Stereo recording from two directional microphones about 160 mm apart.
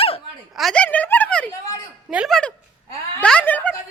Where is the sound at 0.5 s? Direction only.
5° left (ahead or behind).